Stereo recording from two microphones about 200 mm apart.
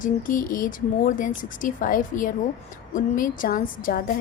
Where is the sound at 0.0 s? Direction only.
40° left (ahead or behind).